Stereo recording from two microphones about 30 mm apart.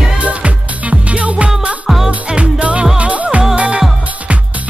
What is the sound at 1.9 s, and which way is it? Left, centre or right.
Music, centre.